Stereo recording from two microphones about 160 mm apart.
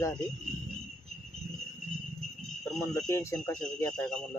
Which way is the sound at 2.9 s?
20° left (ahead or behind).